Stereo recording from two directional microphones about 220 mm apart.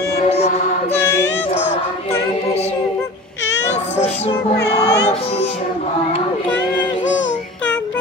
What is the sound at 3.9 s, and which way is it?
Music, 30° left (ahead or behind).